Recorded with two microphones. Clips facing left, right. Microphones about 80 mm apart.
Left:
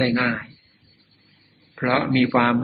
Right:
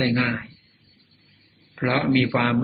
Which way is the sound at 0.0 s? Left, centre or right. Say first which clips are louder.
Left 2 dB; left.